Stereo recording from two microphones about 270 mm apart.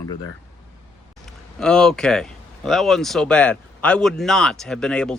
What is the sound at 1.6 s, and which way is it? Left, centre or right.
Speech, centre.